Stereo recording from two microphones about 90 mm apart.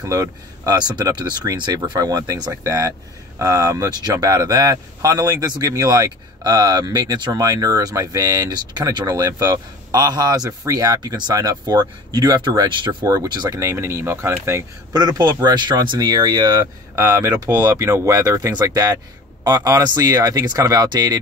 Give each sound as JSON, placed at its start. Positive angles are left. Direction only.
{"t": 0.0, "sound": "speech", "side_deg": -40}
{"t": 13.0, "sound": "speech", "side_deg": -40}
{"t": 13.6, "sound": "speech", "side_deg": -30}
{"t": 14.9, "sound": "speech", "side_deg": -45}
{"t": 16.9, "sound": "speech", "side_deg": -30}